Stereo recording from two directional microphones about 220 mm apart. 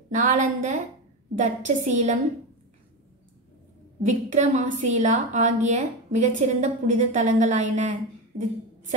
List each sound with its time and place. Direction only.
0.1 s a woman's voice: 35° right (ahead or behind)
4.0 s a woman's voice: 35° right (ahead or behind)